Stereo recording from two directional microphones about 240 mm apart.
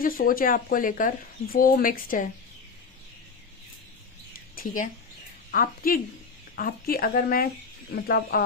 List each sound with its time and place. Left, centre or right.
0.0 s speech: left
4.5 s speech: left